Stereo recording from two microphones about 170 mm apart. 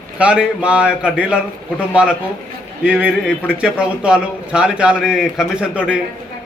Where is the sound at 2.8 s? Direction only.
10° right (ahead or behind).